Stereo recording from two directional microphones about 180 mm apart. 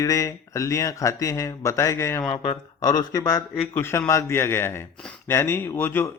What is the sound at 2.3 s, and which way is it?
Speech, 35° left (ahead or behind).